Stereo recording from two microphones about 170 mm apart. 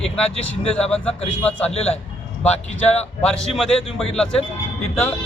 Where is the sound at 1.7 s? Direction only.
35° left (ahead or behind).